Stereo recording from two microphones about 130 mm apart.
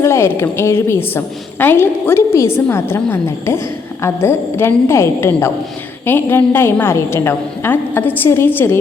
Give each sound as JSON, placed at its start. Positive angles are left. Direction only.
{"t": 0.0, "sound": "a woman's voice", "side_deg": 20}